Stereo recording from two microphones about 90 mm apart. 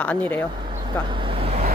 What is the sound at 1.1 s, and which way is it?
Vehicle, 75° right (ahead or behind).